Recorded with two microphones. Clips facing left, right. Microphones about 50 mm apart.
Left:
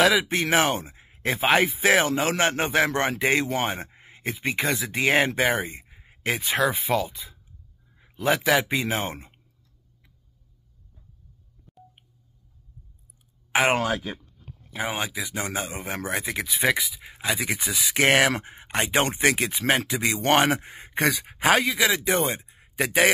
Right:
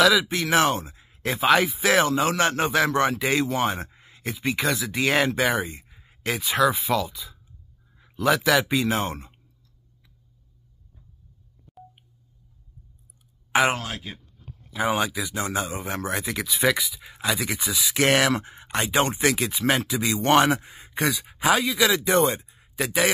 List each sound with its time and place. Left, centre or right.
0.0 s speech: left
11.8 s a sound: centre
13.7 s speech: left
14.8 s speech: centre
15.2 s speech: left
16.7 s speech: centre
17.6 s speech: left
22.5 s a sound: left